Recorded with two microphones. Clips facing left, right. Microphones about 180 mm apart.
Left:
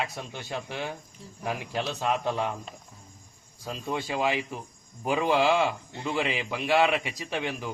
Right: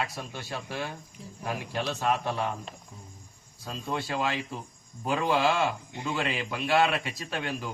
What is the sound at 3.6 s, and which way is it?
A man's voice, 15° left (ahead or behind).